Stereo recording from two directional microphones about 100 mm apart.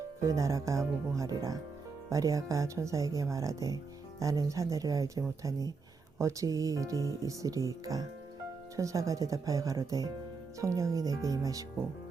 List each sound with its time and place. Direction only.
0.2 s speech: 30° right (ahead or behind)
8.7 s speech: 35° right (ahead or behind)